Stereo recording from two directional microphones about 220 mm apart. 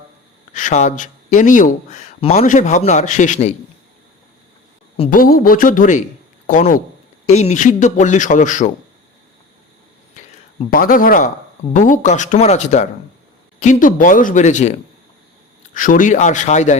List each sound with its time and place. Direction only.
0.5 s speech: 35° left (ahead or behind)
5.1 s speech: 40° left (ahead or behind)
10.2 s a sound: 30° left (ahead or behind)
10.7 s speech: 40° left (ahead or behind)